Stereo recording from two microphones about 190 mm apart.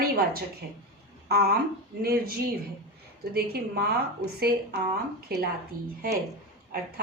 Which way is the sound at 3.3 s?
55° right (ahead or behind).